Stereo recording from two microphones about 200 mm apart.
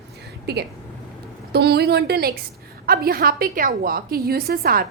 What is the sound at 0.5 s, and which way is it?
A woman's voice, 55° right (ahead or behind).